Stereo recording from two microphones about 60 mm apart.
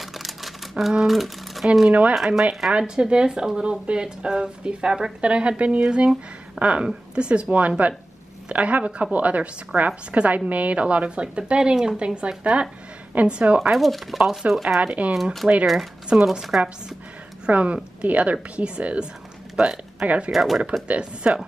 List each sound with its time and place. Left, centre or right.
0.0 s typewriter: centre
1.9 s a woman's voice: right
2.1 s a woman's voice: centre
13.6 s speech: centre
14.8 s a woman's voice: right
15.6 s speech: centre
17.5 s a woman's voice: right
20.2 s speech: centre
20.8 s a woman's voice: right